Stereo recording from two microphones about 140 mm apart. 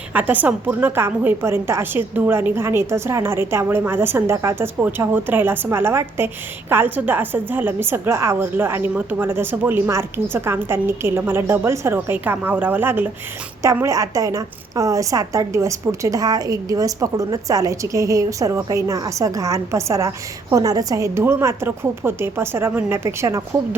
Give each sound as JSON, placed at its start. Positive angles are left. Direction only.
{"t": 0.1, "sound": "a woman's voice", "side_deg": -10}